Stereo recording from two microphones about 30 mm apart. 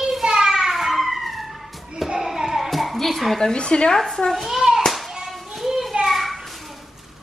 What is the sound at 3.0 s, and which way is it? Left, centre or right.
Speech, centre.